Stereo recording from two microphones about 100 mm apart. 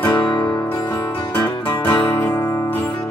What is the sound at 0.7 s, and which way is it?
Music, 20° left (ahead or behind).